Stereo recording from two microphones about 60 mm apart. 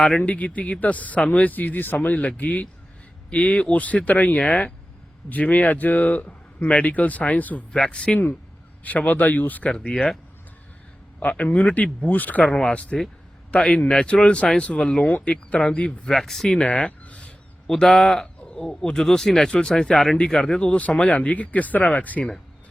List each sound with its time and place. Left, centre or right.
0.2 s speech: left
2.0 s speech: left
7.7 s speech: centre
9.6 s speech: centre
11.2 s speech: left
16.1 s speech: centre
16.6 s a sound: centre
17.7 s speech: centre